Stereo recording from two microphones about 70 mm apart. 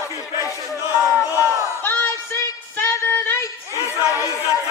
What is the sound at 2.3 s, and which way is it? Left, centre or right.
Music, left.